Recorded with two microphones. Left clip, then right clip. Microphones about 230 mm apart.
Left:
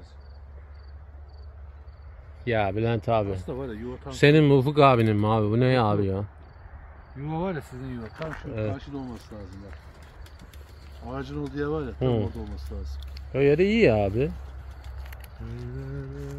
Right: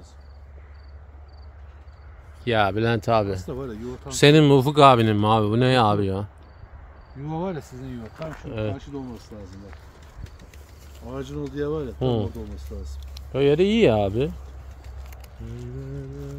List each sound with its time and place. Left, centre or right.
2.4 s speech: right
3.3 s speech: right
4.1 s speech: right
11.0 s speech: centre
15.0 s a sound: centre